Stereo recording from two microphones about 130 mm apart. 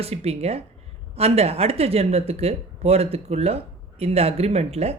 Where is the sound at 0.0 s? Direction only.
50° right (ahead or behind).